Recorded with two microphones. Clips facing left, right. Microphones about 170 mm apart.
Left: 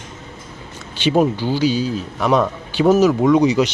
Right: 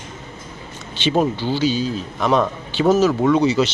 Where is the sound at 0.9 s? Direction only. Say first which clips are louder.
Left 3 dB; 10° left (ahead or behind).